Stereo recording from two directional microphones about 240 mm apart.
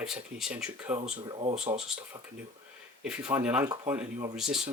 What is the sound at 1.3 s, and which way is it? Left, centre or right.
Speech, right.